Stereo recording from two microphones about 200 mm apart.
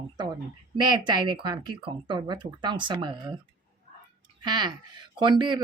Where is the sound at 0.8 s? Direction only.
20° right (ahead or behind).